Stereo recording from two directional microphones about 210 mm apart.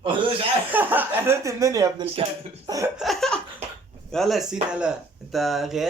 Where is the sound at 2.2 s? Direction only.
25° right (ahead or behind).